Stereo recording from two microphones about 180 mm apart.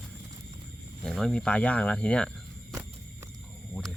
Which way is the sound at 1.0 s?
5° left (ahead or behind).